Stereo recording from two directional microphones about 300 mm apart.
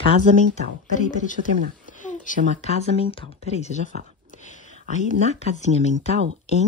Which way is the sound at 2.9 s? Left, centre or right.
Centre.